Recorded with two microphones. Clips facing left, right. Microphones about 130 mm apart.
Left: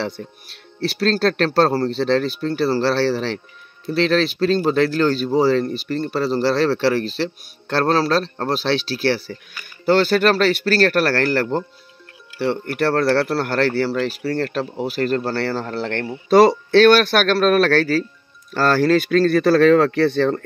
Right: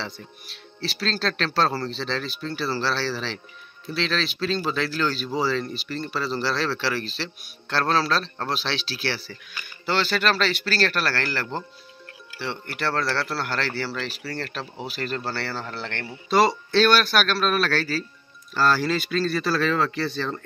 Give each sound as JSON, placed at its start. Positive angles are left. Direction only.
{"t": 0.0, "sound": "speech", "side_deg": 55}